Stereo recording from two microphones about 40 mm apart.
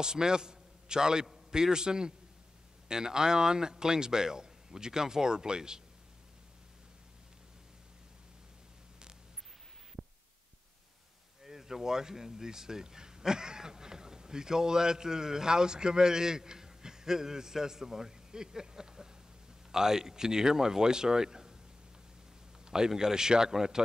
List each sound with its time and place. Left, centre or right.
0.0 s a man's voice: centre
10.0 s heart sounds: centre
11.4 s speech: centre
22.7 s speech: centre